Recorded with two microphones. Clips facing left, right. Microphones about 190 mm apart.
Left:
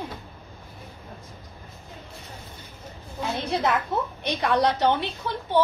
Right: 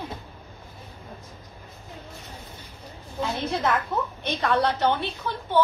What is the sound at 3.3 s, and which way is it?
A woman's voice, 20° left (ahead or behind).